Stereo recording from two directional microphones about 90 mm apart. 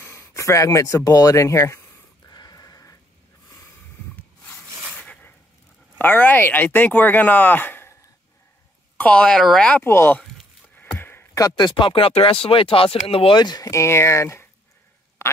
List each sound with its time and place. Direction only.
0.0 s speech: 30° left (ahead or behind)
2.2 s a sound: 45° left (ahead or behind)
5.9 s speech: 20° left (ahead or behind)
8.9 s speech: 15° left (ahead or behind)
9.8 s speech: 25° left (ahead or behind)
11.0 s a sound: 25° left (ahead or behind)
11.3 s speech: 50° left (ahead or behind); by 13.4 s 90° left
13.4 s speech: 50° left (ahead or behind)
13.7 s speech: 30° left (ahead or behind)